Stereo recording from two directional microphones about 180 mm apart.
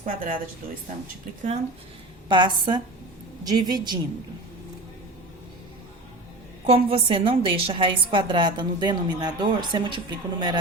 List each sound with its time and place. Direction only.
0.0 s speech: 50° right (ahead or behind)
2.3 s a woman's voice: 25° right (ahead or behind)
6.7 s a woman's voice: 30° right (ahead or behind)